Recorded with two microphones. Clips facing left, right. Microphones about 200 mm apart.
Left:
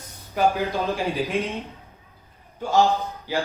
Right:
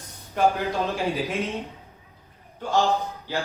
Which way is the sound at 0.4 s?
5° left (ahead or behind).